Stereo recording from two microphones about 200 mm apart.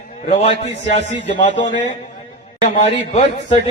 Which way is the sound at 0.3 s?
35° left (ahead or behind).